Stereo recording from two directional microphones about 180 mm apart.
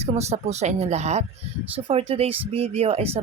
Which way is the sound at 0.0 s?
35° right (ahead or behind).